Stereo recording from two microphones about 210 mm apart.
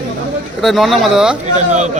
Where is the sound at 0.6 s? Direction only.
Centre (ahead or behind).